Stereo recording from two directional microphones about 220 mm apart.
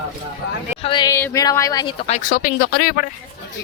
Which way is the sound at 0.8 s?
20° left (ahead or behind).